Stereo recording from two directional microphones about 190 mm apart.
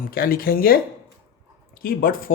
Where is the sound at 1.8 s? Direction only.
50° left (ahead or behind).